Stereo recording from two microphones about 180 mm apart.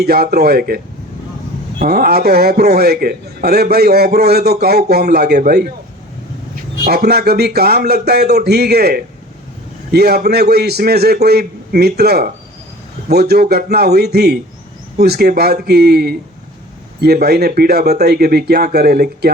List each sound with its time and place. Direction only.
0.0 s a man's voice: 60° right (ahead or behind)
1.8 s a man's voice: 55° right (ahead or behind)
6.8 s a man's voice: 60° right (ahead or behind)